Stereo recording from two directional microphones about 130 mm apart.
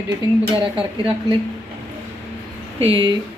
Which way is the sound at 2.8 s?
45° right (ahead or behind).